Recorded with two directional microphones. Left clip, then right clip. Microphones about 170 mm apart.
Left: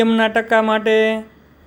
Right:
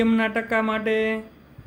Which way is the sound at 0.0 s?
30° left (ahead or behind).